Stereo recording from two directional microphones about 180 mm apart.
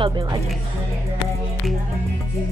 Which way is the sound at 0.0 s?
25° right (ahead or behind).